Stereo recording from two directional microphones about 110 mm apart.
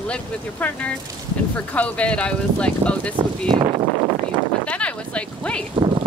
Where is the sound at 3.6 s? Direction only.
40° right (ahead or behind).